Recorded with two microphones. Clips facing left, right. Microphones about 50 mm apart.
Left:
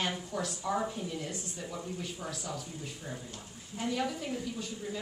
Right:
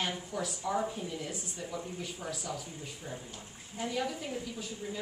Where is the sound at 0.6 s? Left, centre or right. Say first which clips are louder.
Even; centre.